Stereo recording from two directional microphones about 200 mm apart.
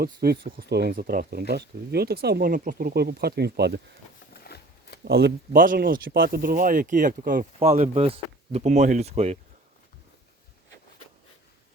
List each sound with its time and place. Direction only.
0.0 s speech: 50° right (ahead or behind)
4.4 s a sound: 55° left (ahead or behind)
5.0 s speech: 55° right (ahead or behind)
7.6 s speech: 30° right (ahead or behind)